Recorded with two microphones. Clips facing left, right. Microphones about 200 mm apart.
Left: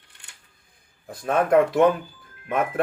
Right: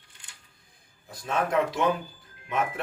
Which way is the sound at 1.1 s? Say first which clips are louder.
Left 7 dB; 55° left (ahead or behind).